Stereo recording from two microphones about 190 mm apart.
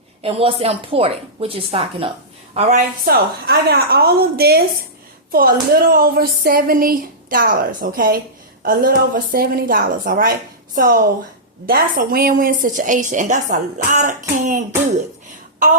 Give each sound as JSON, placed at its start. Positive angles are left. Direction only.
{"t": 0.2, "sound": "a woman's voice", "side_deg": -30}
{"t": 3.0, "sound": "a woman's voice", "side_deg": -55}